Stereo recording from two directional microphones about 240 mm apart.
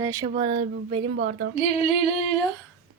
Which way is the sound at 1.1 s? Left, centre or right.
Right.